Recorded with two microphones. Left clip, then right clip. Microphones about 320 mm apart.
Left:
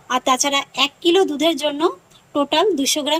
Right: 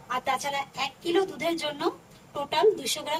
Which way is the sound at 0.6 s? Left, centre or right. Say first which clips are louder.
Left 11 dB; left.